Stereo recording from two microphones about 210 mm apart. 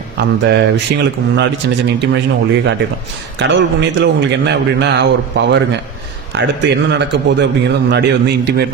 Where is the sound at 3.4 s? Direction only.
55° right (ahead or behind).